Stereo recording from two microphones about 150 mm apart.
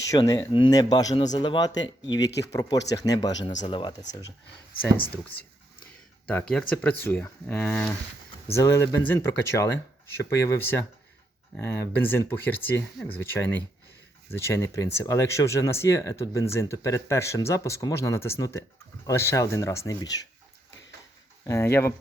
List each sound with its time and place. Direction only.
0.1 s speech: 20° left (ahead or behind)
6.5 s speech: 5° left (ahead or behind)
8.5 s speech: 15° left (ahead or behind)
21.4 s speech: 20° left (ahead or behind)